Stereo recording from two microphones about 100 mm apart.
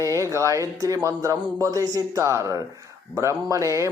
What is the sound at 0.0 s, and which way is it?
Speech, 30° right (ahead or behind).